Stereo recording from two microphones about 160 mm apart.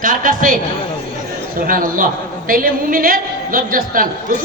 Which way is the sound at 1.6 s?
60° right (ahead or behind).